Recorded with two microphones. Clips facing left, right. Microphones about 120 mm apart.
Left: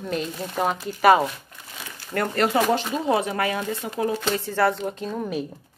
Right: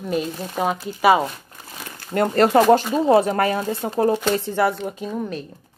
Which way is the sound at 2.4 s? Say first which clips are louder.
Right 7 dB; 40° right (ahead or behind).